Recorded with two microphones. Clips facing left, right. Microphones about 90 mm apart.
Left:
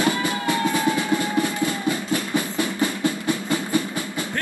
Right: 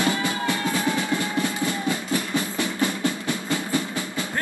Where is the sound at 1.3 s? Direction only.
20° right (ahead or behind).